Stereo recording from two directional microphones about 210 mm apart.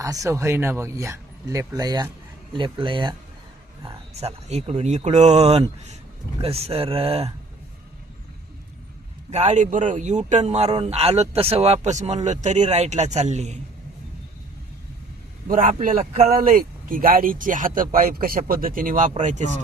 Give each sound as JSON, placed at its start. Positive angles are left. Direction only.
{"t": 0.0, "sound": "speech", "side_deg": -15}
{"t": 9.3, "sound": "speech", "side_deg": -30}
{"t": 15.4, "sound": "speech", "side_deg": -40}